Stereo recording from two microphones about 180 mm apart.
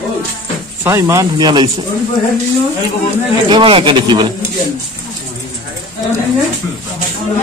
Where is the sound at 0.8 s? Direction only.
15° right (ahead or behind).